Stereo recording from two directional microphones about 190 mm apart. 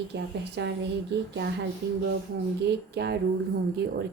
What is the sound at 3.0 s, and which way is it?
Speech, 60° right (ahead or behind).